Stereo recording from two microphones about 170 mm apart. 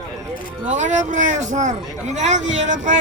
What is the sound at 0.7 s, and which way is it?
Speech, 45° right (ahead or behind).